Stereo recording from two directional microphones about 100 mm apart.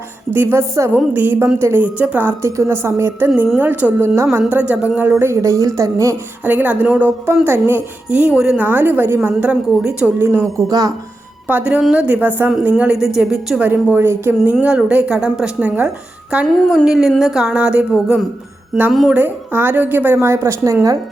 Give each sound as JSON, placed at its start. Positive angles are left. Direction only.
{"t": 0.3, "sound": "a woman's voice", "side_deg": -25}
{"t": 5.2, "sound": "a woman's voice", "side_deg": -30}
{"t": 6.4, "sound": "a woman's voice", "side_deg": -15}
{"t": 9.4, "sound": "speech", "side_deg": -10}
{"t": 10.2, "sound": "a woman's voice", "side_deg": -25}
{"t": 10.7, "sound": "a woman's voice", "side_deg": -40}
{"t": 11.4, "sound": "speech", "side_deg": -15}
{"t": 13.6, "sound": "a woman's voice", "side_deg": -20}
{"t": 14.6, "sound": "speech", "side_deg": -10}
{"t": 19.1, "sound": "a woman's voice", "side_deg": -20}